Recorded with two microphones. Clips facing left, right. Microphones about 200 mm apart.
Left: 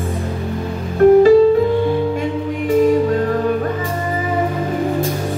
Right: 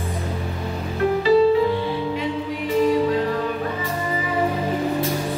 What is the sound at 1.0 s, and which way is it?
Music, 50° left (ahead or behind).